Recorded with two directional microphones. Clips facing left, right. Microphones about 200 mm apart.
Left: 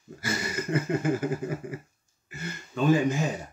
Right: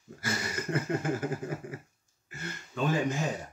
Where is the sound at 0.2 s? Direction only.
5° left (ahead or behind).